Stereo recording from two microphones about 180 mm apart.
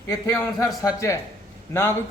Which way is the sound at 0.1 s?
20° left (ahead or behind).